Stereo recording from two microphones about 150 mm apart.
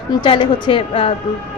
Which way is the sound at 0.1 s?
30° left (ahead or behind).